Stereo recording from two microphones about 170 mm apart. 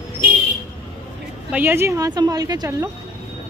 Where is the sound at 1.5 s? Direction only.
10° right (ahead or behind).